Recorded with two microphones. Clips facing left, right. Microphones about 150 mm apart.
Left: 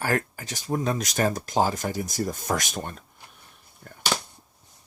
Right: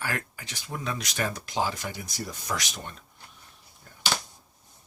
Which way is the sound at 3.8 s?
55° left (ahead or behind).